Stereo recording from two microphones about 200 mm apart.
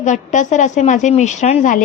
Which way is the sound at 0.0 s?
35° left (ahead or behind).